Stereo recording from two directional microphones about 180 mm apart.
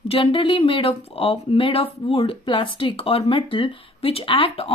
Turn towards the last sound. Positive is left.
turn(degrees=30)  # may be behind; listen again after turning